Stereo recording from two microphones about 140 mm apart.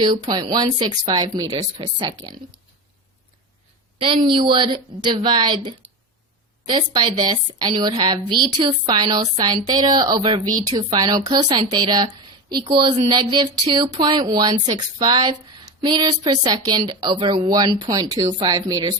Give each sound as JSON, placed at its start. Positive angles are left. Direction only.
{"t": 0.0, "sound": "speech", "side_deg": -30}
{"t": 3.9, "sound": "a woman's voice", "side_deg": -35}